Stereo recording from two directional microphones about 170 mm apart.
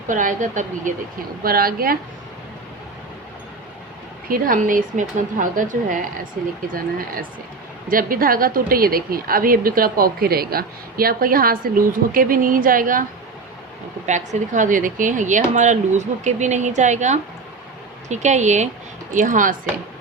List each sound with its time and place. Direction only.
0.1 s speech: 50° right (ahead or behind)
1.5 s a woman's voice: 60° right (ahead or behind)
4.3 s speech: 55° right (ahead or behind)
7.9 s a woman's voice: 55° right (ahead or behind)
14.1 s speech: 45° right (ahead or behind)